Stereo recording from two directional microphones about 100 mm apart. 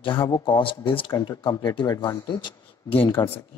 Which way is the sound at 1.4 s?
50° left (ahead or behind).